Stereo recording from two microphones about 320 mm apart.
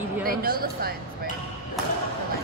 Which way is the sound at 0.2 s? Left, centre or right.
Right.